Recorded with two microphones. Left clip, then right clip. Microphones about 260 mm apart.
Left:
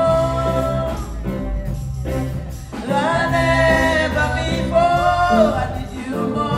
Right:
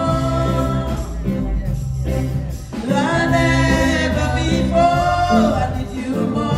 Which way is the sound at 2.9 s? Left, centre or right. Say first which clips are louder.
Even; centre.